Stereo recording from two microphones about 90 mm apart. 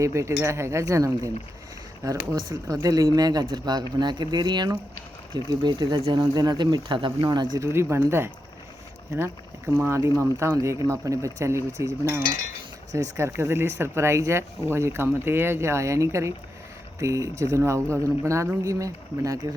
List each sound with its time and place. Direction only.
0.0 s speech: 35° right (ahead or behind); by 7.6 s 50° right (ahead or behind)
7.6 s speech: 30° right (ahead or behind)